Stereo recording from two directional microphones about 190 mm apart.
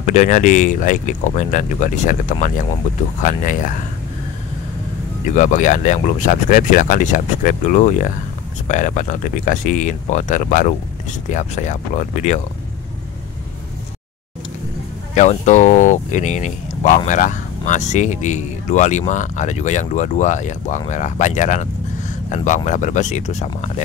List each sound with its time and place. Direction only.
0.0 s speech: 40° left (ahead or behind)
5.3 s speech: 40° left (ahead or behind)
15.1 s speech: 40° left (ahead or behind)